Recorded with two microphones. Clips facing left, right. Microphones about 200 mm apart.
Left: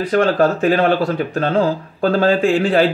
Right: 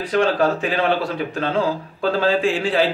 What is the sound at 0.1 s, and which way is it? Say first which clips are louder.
Speech: left 2 dB; 50° left (ahead or behind).